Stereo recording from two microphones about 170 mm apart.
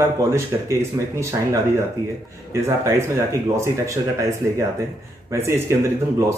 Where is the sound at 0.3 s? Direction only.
15° right (ahead or behind).